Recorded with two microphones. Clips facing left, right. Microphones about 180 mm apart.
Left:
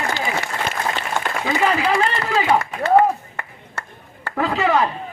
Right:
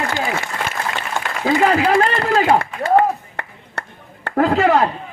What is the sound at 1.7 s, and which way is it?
Speech, 50° right (ahead or behind).